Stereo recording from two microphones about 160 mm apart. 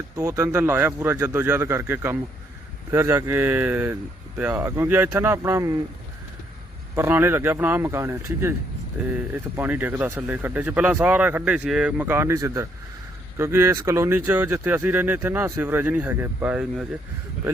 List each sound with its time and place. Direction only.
0.3 s speech: 15° right (ahead or behind)
6.9 s speech: 15° right (ahead or behind)